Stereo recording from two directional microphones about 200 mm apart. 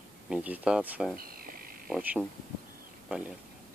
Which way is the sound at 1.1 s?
45° right (ahead or behind).